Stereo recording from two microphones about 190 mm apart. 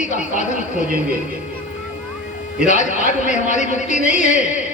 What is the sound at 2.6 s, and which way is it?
A man's voice, 40° left (ahead or behind).